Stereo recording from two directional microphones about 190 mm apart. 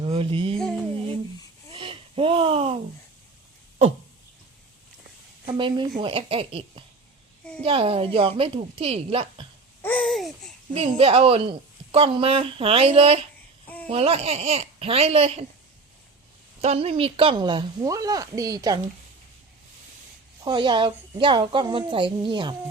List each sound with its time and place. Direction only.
0.0 s a sound: 30° right (ahead or behind)
0.5 s music: 5° left (ahead or behind)
1.7 s a sound: 25° right (ahead or behind)
5.5 s a woman's voice: 25° right (ahead or behind)
9.8 s babbling: 5° left (ahead or behind)
10.8 s a woman's voice: 30° right (ahead or behind)
16.6 s a woman's voice: 30° right (ahead or behind)
20.4 s a woman's voice: 20° right (ahead or behind)